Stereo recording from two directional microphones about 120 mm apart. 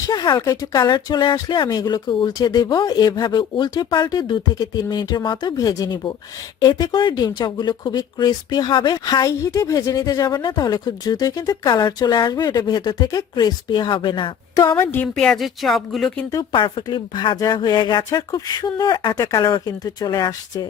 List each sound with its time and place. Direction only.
0.1 s speech: 35° left (ahead or behind)
14.5 s a woman's voice: 30° left (ahead or behind)
14.8 s speech: 15° left (ahead or behind)
15.1 s speech: 5° left (ahead or behind)
16.5 s speech: 45° left (ahead or behind)